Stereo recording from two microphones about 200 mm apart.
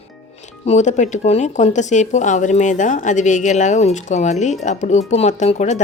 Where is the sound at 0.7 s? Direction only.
35° left (ahead or behind).